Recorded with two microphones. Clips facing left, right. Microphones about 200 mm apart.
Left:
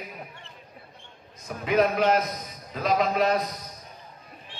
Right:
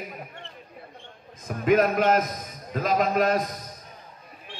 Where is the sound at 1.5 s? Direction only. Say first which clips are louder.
Right 2 dB; 45° right (ahead or behind).